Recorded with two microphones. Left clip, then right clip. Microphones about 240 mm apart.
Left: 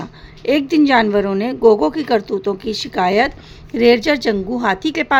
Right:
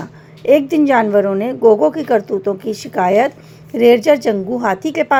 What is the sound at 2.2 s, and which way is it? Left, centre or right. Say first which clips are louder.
Speech: right 2 dB; left.